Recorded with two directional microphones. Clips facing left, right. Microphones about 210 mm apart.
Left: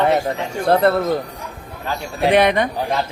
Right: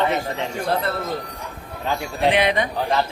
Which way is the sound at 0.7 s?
60° left (ahead or behind).